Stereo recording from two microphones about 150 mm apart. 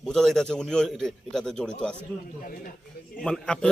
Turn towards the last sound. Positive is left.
turn(degrees=5)  # may be behind; listen again after turning